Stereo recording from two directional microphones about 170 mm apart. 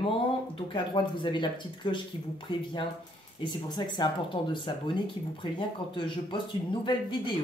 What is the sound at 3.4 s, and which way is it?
Speech, 25° left (ahead or behind).